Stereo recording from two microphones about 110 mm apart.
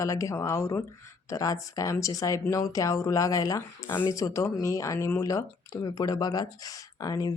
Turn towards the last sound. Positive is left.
turn(degrees=30)  # may be behind; listen again after turning